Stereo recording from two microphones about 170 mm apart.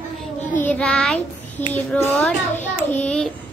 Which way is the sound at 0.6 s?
10° left (ahead or behind).